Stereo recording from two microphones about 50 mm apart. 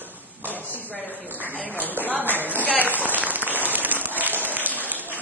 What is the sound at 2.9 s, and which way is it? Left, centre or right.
Applause, right.